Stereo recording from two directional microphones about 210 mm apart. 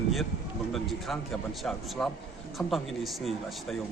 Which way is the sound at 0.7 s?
Centre (ahead or behind).